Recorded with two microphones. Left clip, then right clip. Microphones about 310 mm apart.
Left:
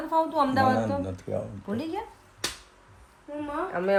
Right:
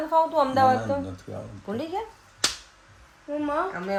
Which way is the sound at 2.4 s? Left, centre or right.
Right.